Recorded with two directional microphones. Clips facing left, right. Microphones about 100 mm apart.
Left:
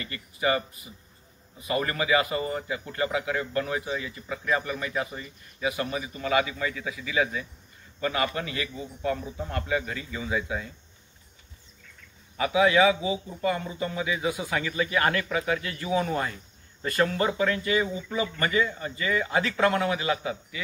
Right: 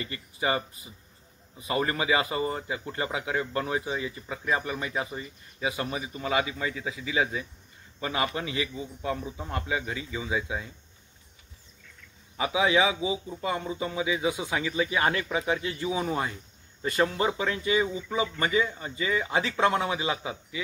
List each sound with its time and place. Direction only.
0.0 s a man's voice: 20° right (ahead or behind)
12.4 s speech: 15° right (ahead or behind)